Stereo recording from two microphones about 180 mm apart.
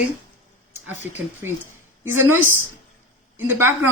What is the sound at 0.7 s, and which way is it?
Speech, 10° right (ahead or behind).